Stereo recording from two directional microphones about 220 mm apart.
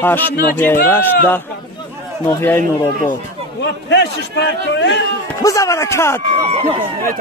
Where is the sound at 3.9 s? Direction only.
50° left (ahead or behind).